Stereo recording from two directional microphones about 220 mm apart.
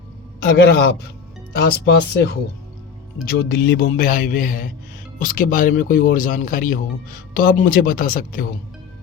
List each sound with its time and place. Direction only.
0.6 s speech: 45° left (ahead or behind)